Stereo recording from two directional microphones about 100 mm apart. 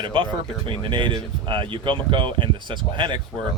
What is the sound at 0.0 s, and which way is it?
Speech, 60° right (ahead or behind).